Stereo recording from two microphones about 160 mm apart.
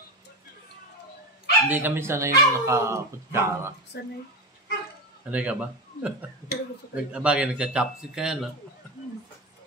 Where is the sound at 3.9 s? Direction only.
90° left.